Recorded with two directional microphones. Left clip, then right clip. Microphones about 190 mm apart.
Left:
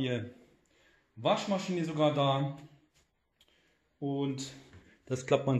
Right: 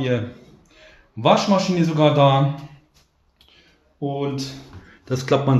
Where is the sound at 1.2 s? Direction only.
15° left (ahead or behind).